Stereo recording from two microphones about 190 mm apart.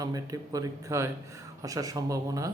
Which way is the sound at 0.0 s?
20° right (ahead or behind).